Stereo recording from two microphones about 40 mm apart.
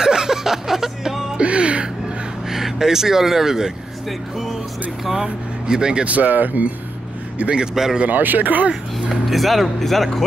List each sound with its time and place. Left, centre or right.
0.0 s music: centre
1.4 s music: right
2.5 s speech: centre
5.0 s speech: centre
6.0 s speech: right
7.5 s speech: centre
8.1 s speech: right
9.1 s speech: centre